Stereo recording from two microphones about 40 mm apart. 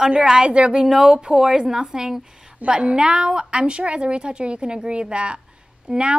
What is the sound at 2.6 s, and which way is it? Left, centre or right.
Speech, right.